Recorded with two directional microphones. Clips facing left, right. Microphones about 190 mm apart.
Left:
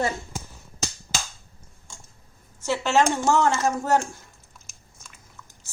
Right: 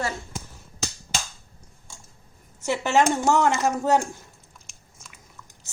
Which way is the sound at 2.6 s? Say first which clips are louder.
Even; 15° right (ahead or behind).